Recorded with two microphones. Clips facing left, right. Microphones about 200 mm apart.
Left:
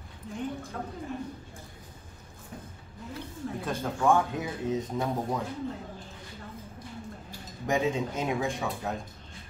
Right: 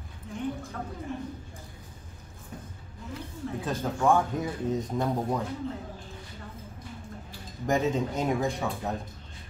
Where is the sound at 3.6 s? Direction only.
Centre (ahead or behind).